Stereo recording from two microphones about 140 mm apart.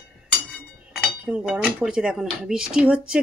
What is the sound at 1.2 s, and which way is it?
Speech, 5° right (ahead or behind).